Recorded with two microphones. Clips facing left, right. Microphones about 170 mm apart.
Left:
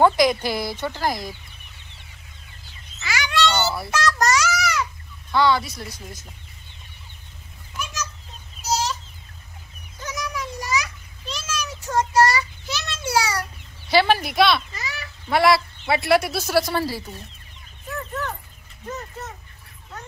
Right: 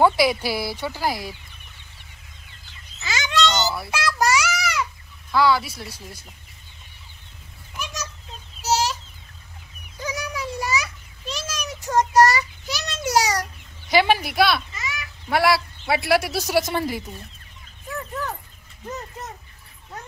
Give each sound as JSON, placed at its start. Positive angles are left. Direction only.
{"t": 0.0, "sound": "a man's voice", "side_deg": -10}
{"t": 3.0, "sound": "bird", "side_deg": -20}
{"t": 3.9, "sound": "babbling", "side_deg": -10}
{"t": 5.3, "sound": "speech", "side_deg": -5}
{"t": 8.6, "sound": "chicken", "side_deg": -90}
{"t": 10.0, "sound": "a sound", "side_deg": -10}
{"t": 11.9, "sound": "child singing", "side_deg": -40}
{"t": 12.6, "sound": "a sound", "side_deg": -15}
{"t": 13.8, "sound": "a man's voice", "side_deg": -15}
{"t": 14.8, "sound": "goose", "side_deg": 35}
{"t": 15.2, "sound": "a man's voice", "side_deg": -5}